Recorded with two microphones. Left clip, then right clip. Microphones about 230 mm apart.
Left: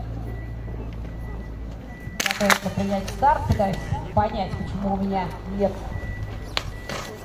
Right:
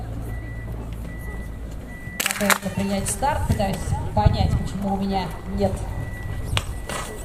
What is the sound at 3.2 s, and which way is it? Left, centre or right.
Speech, right.